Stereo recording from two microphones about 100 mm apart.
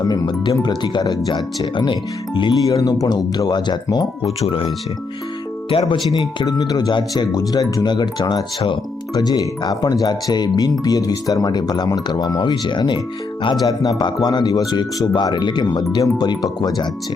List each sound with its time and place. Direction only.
0.0 s speech: 40° left (ahead or behind)
1.7 s speech: 50° left (ahead or behind)
4.4 s speech: 65° left (ahead or behind)
5.9 s speech: 40° left (ahead or behind)
9.1 s speech: 40° left (ahead or behind)